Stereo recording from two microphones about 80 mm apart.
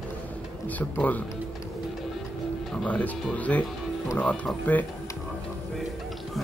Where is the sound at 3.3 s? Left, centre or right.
Centre.